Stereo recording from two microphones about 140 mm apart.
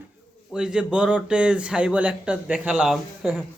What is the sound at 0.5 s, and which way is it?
Speech, 5° right (ahead or behind).